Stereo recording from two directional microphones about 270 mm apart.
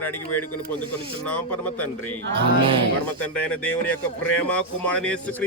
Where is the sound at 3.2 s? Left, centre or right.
Centre.